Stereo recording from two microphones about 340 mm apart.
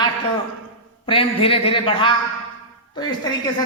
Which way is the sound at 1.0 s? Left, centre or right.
Centre.